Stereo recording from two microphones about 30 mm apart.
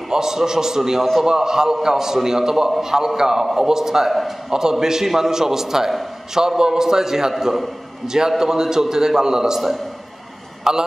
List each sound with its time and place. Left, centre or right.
0.1 s a man's voice: centre
10.7 s a man's voice: centre